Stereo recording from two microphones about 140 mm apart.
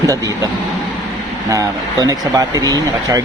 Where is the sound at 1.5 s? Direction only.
25° right (ahead or behind).